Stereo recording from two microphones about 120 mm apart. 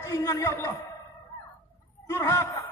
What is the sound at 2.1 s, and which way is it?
Speech, 20° left (ahead or behind).